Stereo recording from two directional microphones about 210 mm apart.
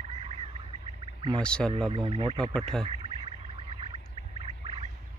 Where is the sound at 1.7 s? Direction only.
25° right (ahead or behind).